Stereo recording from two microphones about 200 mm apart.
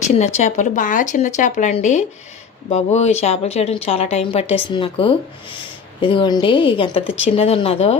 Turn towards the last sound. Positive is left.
turn(degrees=30)  # may be behind; listen again after turning